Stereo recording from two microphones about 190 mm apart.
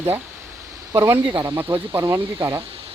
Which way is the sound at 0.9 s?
15° right (ahead or behind).